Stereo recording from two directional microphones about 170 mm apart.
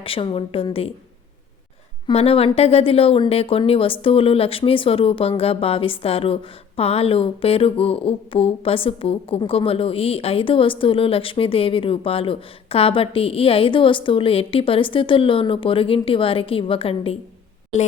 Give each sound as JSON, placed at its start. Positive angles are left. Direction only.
{"t": 0.0, "sound": "a woman's voice", "side_deg": 30}
{"t": 2.0, "sound": "a woman's voice", "side_deg": 35}